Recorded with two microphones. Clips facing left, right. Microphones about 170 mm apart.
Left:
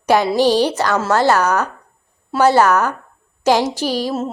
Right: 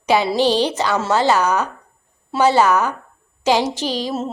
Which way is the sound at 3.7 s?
10° left (ahead or behind).